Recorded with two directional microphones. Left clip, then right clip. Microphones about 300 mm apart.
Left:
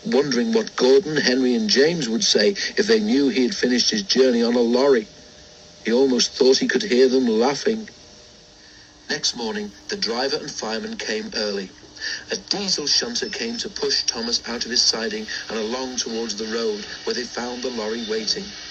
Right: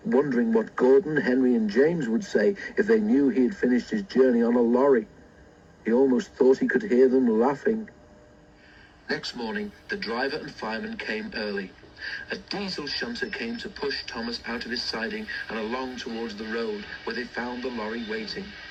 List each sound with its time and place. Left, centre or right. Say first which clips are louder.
0.1 s speech: left 3 dB; right
9.0 s speech: left 6 dB; centre